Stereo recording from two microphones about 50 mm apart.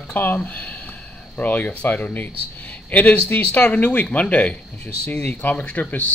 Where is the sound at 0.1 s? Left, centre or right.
Left.